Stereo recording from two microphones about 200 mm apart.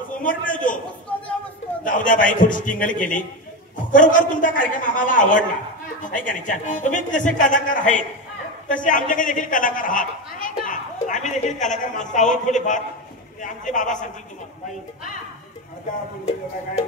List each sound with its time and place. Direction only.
0.2 s a man's voice: 40° left (ahead or behind)
1.9 s a man's voice: 40° left (ahead or behind)